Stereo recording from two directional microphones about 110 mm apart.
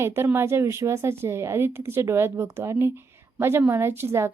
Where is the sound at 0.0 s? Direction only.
25° right (ahead or behind).